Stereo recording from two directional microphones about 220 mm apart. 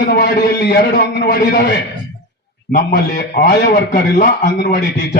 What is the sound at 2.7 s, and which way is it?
A man's voice, 40° left (ahead or behind).